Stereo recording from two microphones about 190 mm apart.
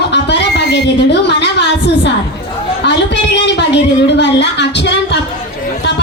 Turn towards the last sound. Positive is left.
turn(degrees=65)  # may be behind; listen again after turning